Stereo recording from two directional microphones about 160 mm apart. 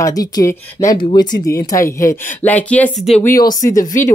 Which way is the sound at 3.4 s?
20° left (ahead or behind).